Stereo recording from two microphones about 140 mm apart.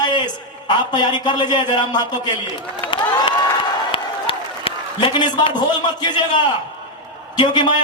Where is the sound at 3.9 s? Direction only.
40° left (ahead or behind).